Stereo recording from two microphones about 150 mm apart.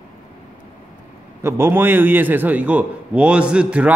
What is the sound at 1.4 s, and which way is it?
A man's voice, 15° right (ahead or behind).